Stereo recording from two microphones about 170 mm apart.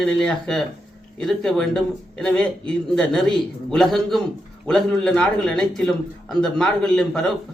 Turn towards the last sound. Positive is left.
turn(degrees=5)  # may be behind; listen again after turning